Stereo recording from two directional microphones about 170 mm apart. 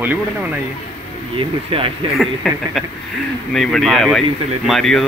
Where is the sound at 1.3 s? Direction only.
30° right (ahead or behind).